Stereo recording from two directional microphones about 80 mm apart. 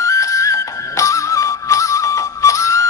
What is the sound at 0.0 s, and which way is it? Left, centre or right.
Music, left.